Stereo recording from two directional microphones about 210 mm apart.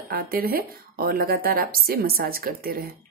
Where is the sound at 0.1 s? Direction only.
45° right (ahead or behind).